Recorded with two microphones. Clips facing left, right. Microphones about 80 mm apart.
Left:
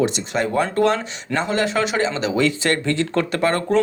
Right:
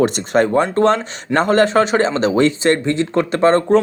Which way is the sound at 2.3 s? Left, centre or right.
Right.